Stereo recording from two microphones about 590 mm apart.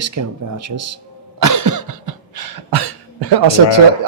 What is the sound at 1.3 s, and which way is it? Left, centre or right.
Cough, right.